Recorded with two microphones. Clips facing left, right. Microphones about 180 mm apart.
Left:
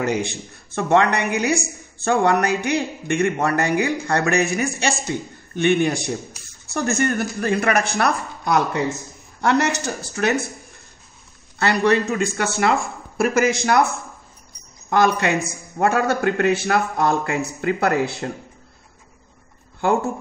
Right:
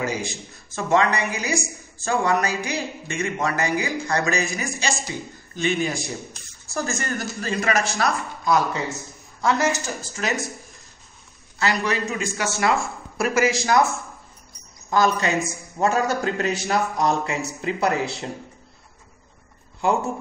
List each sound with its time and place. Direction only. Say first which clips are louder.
0.0 s a man's voice: left 5 dB; 65° left (ahead or behind)
11.5 s a man's voice: left 6 dB; 60° left (ahead or behind)
14.9 s a man's voice: left 2 dB; 60° left (ahead or behind)